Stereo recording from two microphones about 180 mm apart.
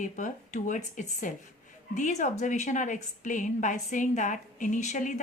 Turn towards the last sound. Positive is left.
turn(degrees=40)  # may be behind; listen again after turning